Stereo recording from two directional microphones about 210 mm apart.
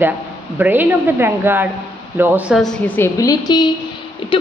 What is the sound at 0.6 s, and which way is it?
A woman's voice, 10° right (ahead or behind).